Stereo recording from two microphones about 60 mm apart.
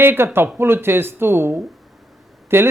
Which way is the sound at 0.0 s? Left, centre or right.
Right.